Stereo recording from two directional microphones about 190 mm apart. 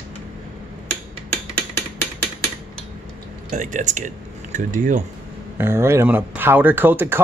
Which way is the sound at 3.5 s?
40° right (ahead or behind).